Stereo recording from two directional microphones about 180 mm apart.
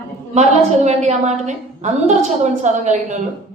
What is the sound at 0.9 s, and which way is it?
A woman's voice, 40° right (ahead or behind).